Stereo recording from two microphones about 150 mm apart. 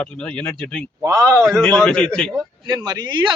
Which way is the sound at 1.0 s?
20° right (ahead or behind).